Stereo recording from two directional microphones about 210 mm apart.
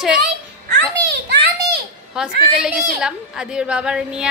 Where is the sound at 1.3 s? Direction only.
55° right (ahead or behind).